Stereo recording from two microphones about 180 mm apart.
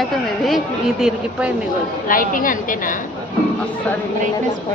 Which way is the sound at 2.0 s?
50° left (ahead or behind).